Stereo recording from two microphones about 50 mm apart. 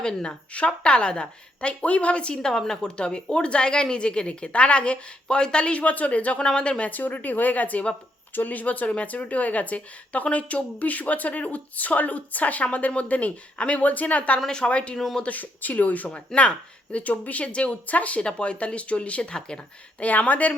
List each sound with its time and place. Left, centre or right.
0.0 s a woman's voice: centre
14.3 s a woman's voice: centre
14.9 s speech: centre
15.2 s a woman's voice: left; by 19.6 s centre
20.0 s speech: left